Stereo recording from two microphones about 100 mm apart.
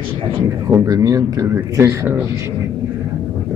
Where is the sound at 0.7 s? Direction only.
35° right (ahead or behind).